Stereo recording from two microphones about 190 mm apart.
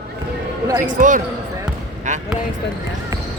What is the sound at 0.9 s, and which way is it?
Speech, 45° right (ahead or behind).